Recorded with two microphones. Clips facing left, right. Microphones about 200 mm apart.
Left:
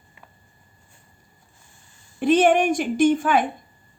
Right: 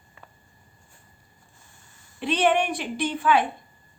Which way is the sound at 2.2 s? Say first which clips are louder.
Left 6 dB; 45° left (ahead or behind).